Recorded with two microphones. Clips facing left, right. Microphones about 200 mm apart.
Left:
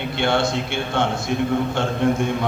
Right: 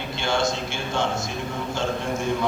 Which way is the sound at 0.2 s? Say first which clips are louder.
Left 4 dB; 60° left (ahead or behind).